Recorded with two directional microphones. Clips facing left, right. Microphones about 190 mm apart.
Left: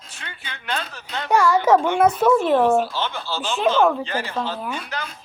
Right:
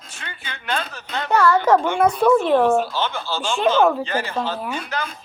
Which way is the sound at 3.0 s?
50° right (ahead or behind).